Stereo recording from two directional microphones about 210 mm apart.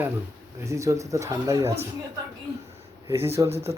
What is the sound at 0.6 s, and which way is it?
Speech, 15° right (ahead or behind).